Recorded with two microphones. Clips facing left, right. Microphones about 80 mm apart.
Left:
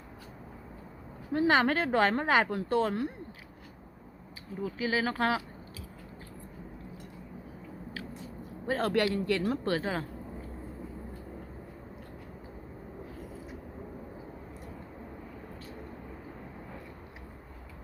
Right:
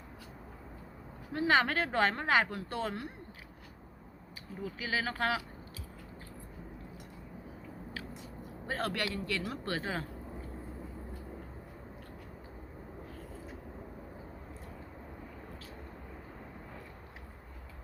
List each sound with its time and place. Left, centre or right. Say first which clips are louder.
1.3 s speech: left 3 dB; left
4.6 s speech: left 5 dB; left
8.7 s speech: left 7 dB; left